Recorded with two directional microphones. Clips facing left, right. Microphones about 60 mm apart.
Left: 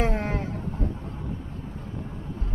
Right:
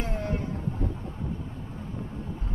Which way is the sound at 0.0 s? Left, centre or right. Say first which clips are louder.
Left 5 dB; left.